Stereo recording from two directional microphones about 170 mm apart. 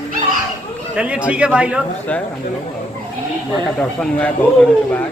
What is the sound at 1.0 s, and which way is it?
Speech, 5° right (ahead or behind).